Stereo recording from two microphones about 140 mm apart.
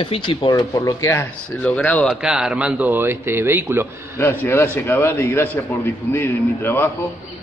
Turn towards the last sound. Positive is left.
turn(degrees=15)  # may be behind; listen again after turning